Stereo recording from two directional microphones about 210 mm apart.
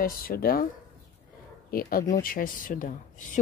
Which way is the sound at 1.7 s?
45° left (ahead or behind).